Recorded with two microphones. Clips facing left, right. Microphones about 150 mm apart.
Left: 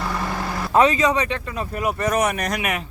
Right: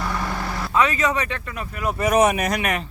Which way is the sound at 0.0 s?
5° left (ahead or behind).